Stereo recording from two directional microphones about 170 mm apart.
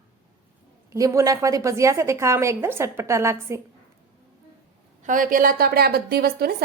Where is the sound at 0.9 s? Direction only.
20° right (ahead or behind).